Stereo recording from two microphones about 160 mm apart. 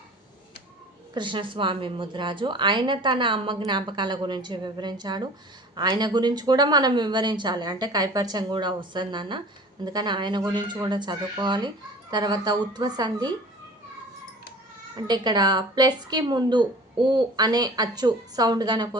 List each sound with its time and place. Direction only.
1.1 s a woman's voice: 30° right (ahead or behind)
14.9 s a woman's voice: 25° right (ahead or behind)